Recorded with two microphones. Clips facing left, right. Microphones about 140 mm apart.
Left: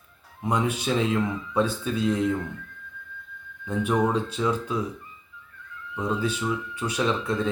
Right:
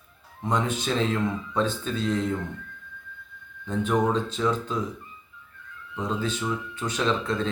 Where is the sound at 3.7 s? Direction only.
10° left (ahead or behind).